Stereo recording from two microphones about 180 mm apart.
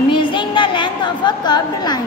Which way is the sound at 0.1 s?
25° left (ahead or behind).